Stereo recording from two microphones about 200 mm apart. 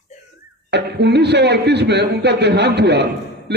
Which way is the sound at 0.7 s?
55° right (ahead or behind).